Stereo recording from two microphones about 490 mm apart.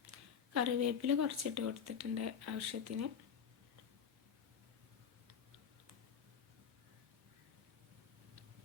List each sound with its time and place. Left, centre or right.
0.1 s speech: right